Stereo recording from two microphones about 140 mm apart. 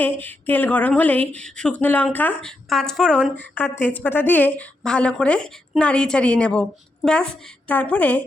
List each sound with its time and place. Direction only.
0.0 s a woman's voice: 10° left (ahead or behind)